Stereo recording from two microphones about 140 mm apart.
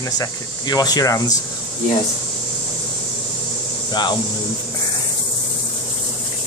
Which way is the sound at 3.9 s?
30° left (ahead or behind).